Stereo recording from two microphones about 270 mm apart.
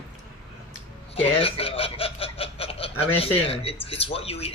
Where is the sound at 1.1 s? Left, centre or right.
Left.